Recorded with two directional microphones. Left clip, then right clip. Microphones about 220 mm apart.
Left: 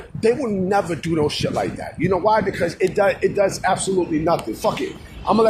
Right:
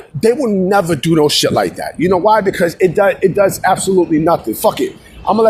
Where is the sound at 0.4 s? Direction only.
40° right (ahead or behind).